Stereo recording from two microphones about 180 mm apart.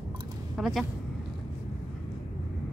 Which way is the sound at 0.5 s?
Centre (ahead or behind).